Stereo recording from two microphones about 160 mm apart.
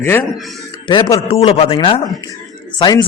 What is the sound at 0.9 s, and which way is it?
A man's voice, 30° left (ahead or behind).